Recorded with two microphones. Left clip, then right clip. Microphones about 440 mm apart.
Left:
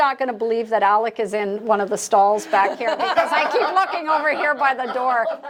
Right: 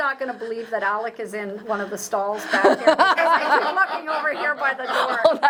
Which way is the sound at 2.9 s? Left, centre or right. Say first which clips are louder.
Right 5 dB; right.